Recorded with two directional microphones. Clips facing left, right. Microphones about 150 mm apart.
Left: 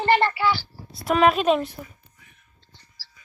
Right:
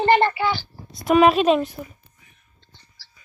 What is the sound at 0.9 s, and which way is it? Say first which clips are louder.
Speech: right 4 dB; centre (ahead or behind).